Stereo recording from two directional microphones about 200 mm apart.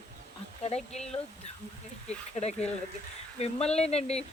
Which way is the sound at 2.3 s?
35° left (ahead or behind).